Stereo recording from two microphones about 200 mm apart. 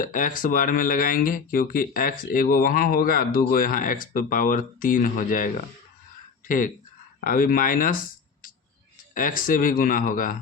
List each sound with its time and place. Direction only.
0.0 s speech: 40° left (ahead or behind)
6.5 s speech: 40° left (ahead or behind)
9.1 s speech: 45° left (ahead or behind)